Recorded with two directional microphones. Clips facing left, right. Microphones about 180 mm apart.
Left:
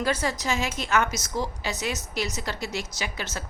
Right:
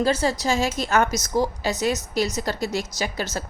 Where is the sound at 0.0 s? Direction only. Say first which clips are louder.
Right 5 dB; 30° right (ahead or behind).